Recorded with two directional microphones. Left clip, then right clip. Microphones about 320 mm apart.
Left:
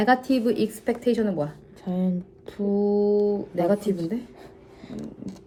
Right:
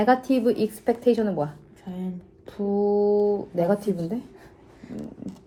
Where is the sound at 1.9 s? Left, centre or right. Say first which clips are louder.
Left 7 dB; left.